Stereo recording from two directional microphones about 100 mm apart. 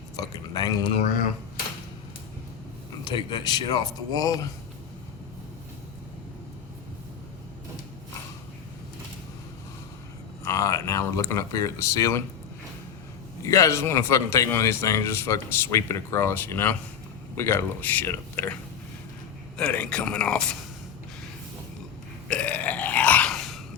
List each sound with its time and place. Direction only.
0.2 s speech: 40° left (ahead or behind)
3.0 s speech: 45° left (ahead or behind)
10.4 s speech: 30° left (ahead or behind)
13.4 s a man's voice: 35° left (ahead or behind)
19.5 s speech: 10° left (ahead or behind)
22.3 s burping: 15° left (ahead or behind)
23.3 s a sound: centre (ahead or behind)